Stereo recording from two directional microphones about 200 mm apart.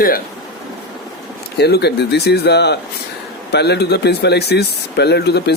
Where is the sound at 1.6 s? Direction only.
55° left (ahead or behind).